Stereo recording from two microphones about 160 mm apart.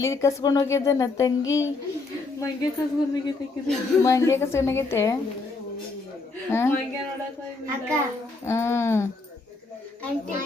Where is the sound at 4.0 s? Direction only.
20° left (ahead or behind).